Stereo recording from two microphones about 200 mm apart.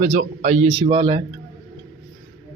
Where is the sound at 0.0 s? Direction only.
35° right (ahead or behind).